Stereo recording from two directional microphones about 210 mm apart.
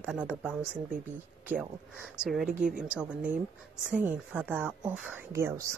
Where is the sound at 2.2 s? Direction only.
5° right (ahead or behind).